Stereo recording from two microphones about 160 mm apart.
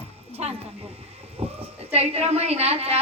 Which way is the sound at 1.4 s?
40° right (ahead or behind).